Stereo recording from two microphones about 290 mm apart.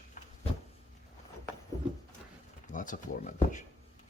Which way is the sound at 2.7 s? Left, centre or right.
Left.